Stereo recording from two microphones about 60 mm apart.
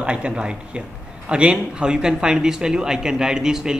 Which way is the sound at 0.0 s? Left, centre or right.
Centre.